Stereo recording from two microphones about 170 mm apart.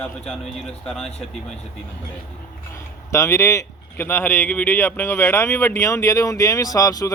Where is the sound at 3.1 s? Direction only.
15° left (ahead or behind).